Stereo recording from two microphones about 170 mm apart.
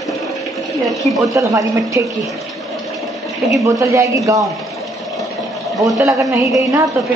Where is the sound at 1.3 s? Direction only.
20° right (ahead or behind).